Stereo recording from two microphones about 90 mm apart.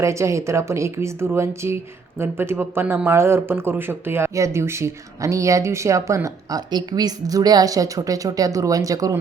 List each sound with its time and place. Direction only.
0.0 s speech: 35° right (ahead or behind)
6.7 s speech: 50° right (ahead or behind)